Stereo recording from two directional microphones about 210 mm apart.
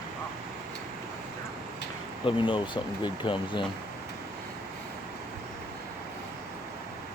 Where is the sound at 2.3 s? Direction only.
25° left (ahead or behind).